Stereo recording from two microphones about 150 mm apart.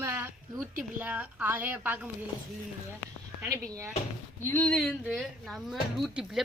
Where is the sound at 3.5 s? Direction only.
20° right (ahead or behind).